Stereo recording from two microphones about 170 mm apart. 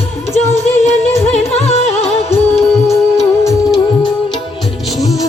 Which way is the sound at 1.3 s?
40° left (ahead or behind).